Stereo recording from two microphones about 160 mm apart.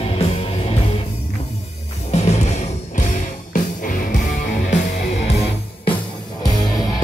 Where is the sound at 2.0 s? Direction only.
45° left (ahead or behind).